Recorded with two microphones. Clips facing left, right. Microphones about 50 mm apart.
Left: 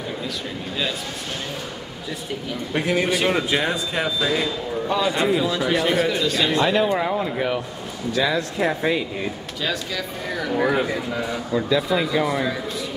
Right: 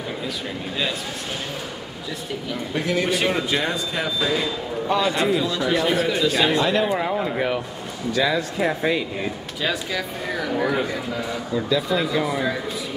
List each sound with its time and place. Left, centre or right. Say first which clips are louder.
2.7 s a man's voice: left 1 dB; centre
9.6 s speech: right 2 dB; centre
10.6 s speech: left 4 dB; centre